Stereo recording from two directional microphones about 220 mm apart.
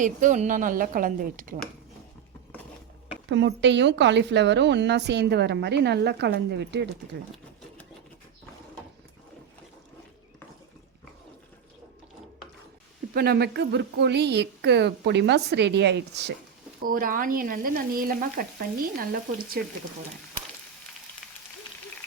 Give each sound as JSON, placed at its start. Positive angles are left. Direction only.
{"t": 0.0, "sound": "frying", "side_deg": -35}
{"t": 3.2, "sound": "a woman's voice", "side_deg": -55}
{"t": 13.1, "sound": "a woman's voice", "side_deg": -45}
{"t": 16.8, "sound": "frying", "side_deg": -40}
{"t": 19.6, "sound": "a woman's voice", "side_deg": -45}